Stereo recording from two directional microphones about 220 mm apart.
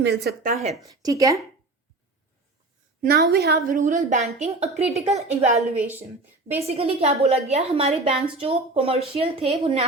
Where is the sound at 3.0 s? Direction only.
45° right (ahead or behind); by 5.6 s 30° right (ahead or behind).